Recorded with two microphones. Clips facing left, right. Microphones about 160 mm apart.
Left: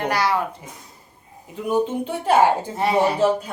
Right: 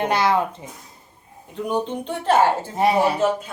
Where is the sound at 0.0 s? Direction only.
20° right (ahead or behind).